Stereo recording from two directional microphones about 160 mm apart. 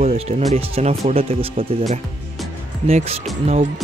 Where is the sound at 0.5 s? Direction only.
40° right (ahead or behind).